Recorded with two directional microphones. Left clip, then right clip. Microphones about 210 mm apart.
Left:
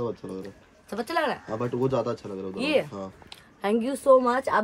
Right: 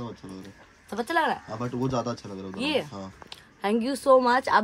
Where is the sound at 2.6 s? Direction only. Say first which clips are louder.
Left 3 dB; 5° right (ahead or behind).